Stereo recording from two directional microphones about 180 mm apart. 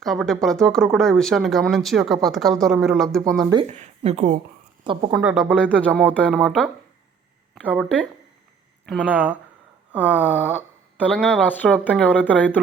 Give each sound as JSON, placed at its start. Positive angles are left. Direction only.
{"t": 0.0, "sound": "speech", "side_deg": 0}
{"t": 3.7, "sound": "speech", "side_deg": -40}
{"t": 4.8, "sound": "a woman's voice", "side_deg": -25}
{"t": 5.2, "sound": "speech", "side_deg": 0}
{"t": 8.9, "sound": "speech", "side_deg": -5}
{"t": 10.3, "sound": "speech", "side_deg": 10}